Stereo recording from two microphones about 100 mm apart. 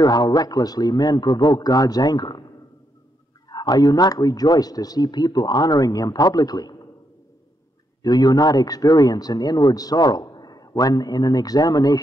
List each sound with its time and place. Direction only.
0.0 s a man's voice: 45° left (ahead or behind)
3.4 s speech: 45° left (ahead or behind)
8.0 s speech: 40° left (ahead or behind)